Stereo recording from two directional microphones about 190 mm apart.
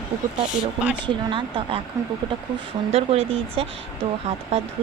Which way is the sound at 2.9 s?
30° right (ahead or behind).